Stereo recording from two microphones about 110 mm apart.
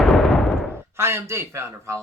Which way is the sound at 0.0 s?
Centre (ahead or behind).